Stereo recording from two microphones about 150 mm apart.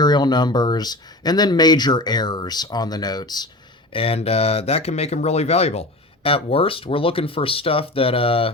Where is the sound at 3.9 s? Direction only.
40° left (ahead or behind).